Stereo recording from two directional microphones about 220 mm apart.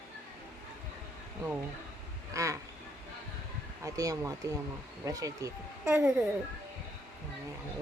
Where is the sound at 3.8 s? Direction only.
15° right (ahead or behind).